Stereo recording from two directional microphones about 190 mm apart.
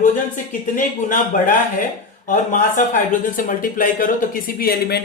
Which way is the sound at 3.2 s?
45° left (ahead or behind).